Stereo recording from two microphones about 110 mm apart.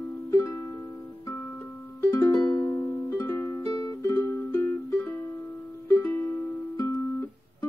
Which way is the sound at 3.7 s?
35° left (ahead or behind).